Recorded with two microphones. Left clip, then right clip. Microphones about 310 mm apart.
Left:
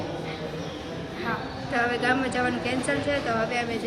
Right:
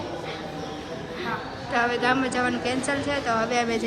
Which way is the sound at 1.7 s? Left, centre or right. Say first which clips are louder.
Right 2 dB; centre.